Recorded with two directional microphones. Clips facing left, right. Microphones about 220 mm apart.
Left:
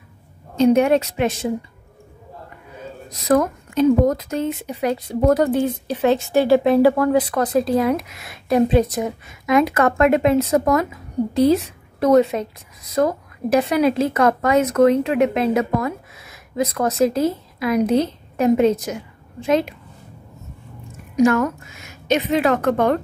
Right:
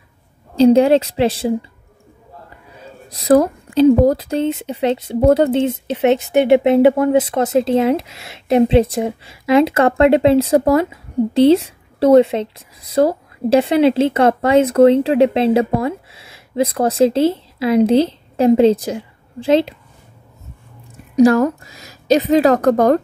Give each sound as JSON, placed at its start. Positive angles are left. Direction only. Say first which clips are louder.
{"t": 0.6, "sound": "speech", "louder": "right 4 dB", "side_deg": -30}
{"t": 3.1, "sound": "speech", "louder": "right 5 dB", "side_deg": -30}
{"t": 21.2, "sound": "speech", "louder": "right 5 dB", "side_deg": -35}